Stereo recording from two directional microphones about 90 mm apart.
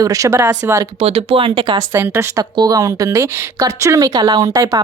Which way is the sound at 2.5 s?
45° right (ahead or behind).